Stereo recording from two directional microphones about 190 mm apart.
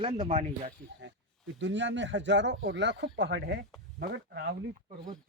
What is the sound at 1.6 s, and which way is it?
Speech, 70° right (ahead or behind).